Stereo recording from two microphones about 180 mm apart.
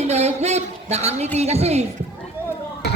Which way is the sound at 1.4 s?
35° right (ahead or behind).